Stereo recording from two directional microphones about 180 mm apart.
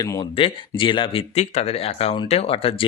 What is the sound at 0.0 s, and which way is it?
Speech, 25° left (ahead or behind).